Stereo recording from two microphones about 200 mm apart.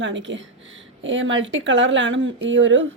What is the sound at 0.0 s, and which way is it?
Speech, 65° right (ahead or behind).